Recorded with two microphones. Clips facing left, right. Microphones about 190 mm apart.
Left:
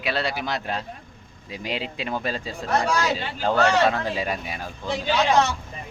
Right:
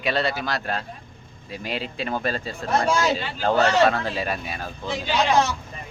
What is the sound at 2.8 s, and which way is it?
Speech, 25° right (ahead or behind).